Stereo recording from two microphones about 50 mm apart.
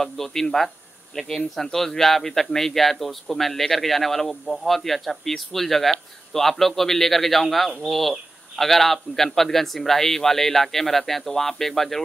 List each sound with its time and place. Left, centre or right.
0.0 s speech: centre